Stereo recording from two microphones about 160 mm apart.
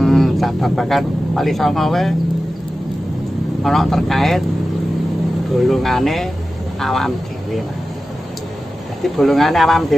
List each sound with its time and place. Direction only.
0.0 s speech: centre (ahead or behind)
3.6 s speech: centre (ahead or behind)
5.6 s speech: centre (ahead or behind)
9.0 s speech: centre (ahead or behind)